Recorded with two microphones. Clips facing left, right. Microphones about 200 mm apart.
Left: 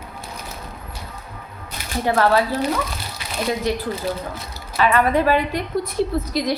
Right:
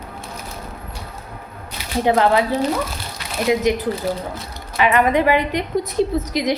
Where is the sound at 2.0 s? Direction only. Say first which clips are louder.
Right 2 dB; 20° right (ahead or behind).